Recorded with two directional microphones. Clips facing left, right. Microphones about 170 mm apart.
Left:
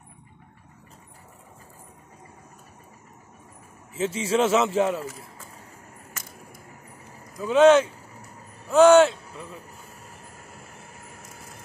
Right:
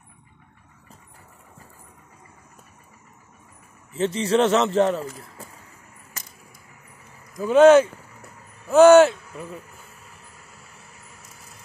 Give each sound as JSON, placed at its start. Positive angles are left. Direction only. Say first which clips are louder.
{"t": 3.9, "sound": "a man's voice", "louder": "right 3 dB", "side_deg": 5}
{"t": 7.3, "sound": "a man's voice", "louder": "right 3 dB", "side_deg": 0}
{"t": 10.0, "sound": "vehicle", "louder": "left 3 dB", "side_deg": 45}